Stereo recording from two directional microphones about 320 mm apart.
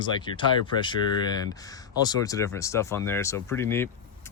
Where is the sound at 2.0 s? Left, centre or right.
Centre.